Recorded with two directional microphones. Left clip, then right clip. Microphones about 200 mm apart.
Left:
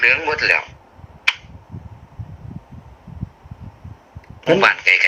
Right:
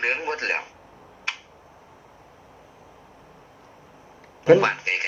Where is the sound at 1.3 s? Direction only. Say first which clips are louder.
Left 11 dB; 40° left (ahead or behind).